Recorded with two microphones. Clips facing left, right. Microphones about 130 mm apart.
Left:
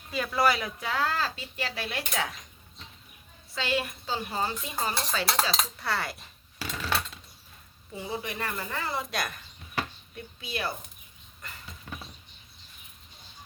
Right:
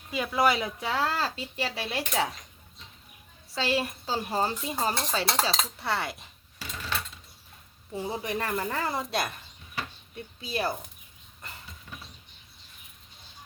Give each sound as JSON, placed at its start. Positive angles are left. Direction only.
{"t": 0.1, "sound": "speech", "side_deg": -15}
{"t": 3.5, "sound": "speech", "side_deg": -35}
{"t": 6.6, "sound": "tools", "side_deg": 70}
{"t": 7.9, "sound": "speech", "side_deg": -40}
{"t": 10.4, "sound": "speech", "side_deg": -40}